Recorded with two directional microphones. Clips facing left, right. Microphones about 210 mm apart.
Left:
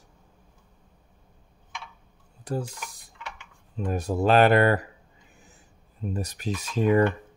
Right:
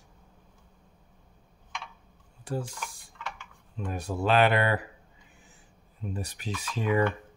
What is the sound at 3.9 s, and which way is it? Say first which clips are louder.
Speech: left 5 dB; 40° left (ahead or behind).